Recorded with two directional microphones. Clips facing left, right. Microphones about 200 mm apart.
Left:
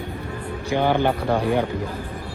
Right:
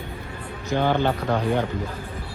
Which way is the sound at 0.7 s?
15° left (ahead or behind).